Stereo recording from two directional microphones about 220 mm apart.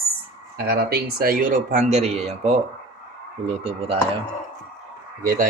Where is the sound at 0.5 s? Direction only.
45° right (ahead or behind); by 3.9 s 25° right (ahead or behind).